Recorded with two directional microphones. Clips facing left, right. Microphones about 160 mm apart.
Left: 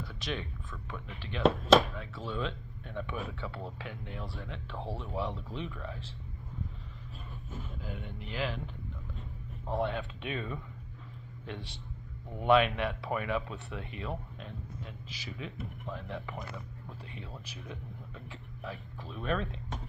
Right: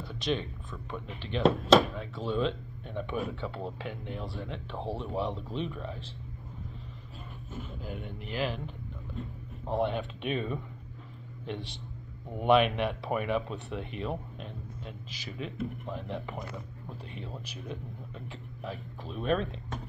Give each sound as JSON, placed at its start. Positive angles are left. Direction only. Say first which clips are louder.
{"t": 0.1, "sound": "a sound", "louder": "right 9 dB", "side_deg": -20}
{"t": 0.9, "sound": "speech", "louder": "right 5 dB", "side_deg": -20}
{"t": 7.8, "sound": "speech", "louder": "right 3 dB", "side_deg": -15}
{"t": 9.7, "sound": "speech", "louder": "right 3 dB", "side_deg": -15}
{"t": 12.4, "sound": "speech", "louder": "right 2 dB", "side_deg": -20}